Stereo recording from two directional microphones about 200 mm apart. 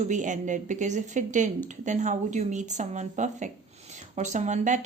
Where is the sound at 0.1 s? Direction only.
40° right (ahead or behind).